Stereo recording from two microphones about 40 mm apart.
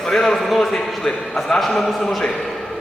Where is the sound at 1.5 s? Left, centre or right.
Centre.